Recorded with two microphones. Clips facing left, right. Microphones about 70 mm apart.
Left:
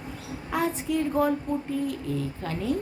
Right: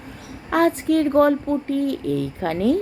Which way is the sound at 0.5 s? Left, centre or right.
Right.